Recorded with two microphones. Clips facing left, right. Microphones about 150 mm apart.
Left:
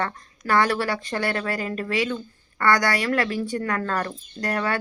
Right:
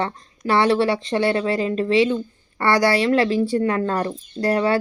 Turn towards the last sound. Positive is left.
turn(degrees=-25)  # may be behind; listen again after turning